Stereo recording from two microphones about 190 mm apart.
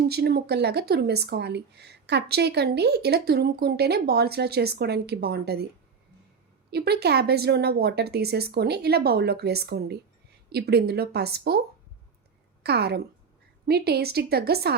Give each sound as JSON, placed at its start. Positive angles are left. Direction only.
{"t": 0.1, "sound": "speech", "side_deg": -55}
{"t": 6.7, "sound": "speech", "side_deg": -60}
{"t": 12.6, "sound": "speech", "side_deg": -60}